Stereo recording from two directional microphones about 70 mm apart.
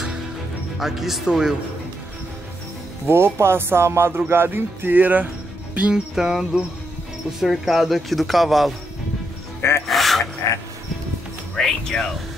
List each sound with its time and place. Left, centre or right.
0.7 s a man's voice: centre
3.1 s music: right
5.8 s music: centre
7.3 s a man's voice: centre
9.6 s music: left
9.8 s a sound: centre
11.5 s speech: centre